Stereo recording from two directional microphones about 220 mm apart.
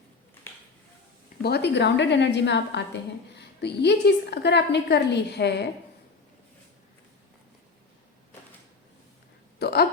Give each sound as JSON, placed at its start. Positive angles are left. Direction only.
{"t": 1.4, "sound": "a woman's voice", "side_deg": 45}
{"t": 9.6, "sound": "hiccup", "side_deg": 45}